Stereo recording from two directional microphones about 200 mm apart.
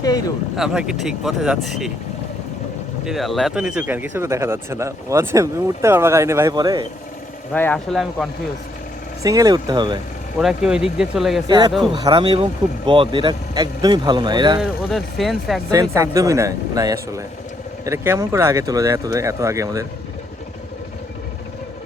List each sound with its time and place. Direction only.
0.5 s speech: centre (ahead or behind)
3.0 s speech: centre (ahead or behind); by 6.8 s 20° right (ahead or behind)
7.5 s speech: 10° left (ahead or behind)
9.2 s speech: 20° right (ahead or behind)
10.4 s speech: 5° right (ahead or behind)
11.4 s speech: 20° right (ahead or behind)
14.6 s speech: centre (ahead or behind)
15.7 s speech: 15° right (ahead or behind)